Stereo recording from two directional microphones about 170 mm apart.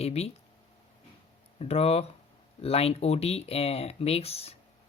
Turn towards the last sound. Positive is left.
turn(degrees=35)  # may be behind; listen again after turning